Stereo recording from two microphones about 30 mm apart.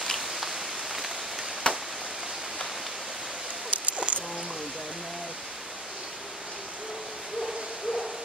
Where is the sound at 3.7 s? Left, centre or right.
Right.